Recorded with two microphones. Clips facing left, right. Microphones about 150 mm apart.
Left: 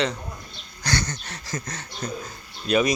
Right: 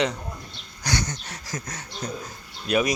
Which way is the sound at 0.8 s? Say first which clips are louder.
Left 1 dB; 15° right (ahead or behind).